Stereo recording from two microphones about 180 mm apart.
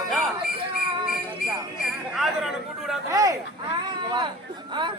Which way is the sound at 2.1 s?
Centre (ahead or behind).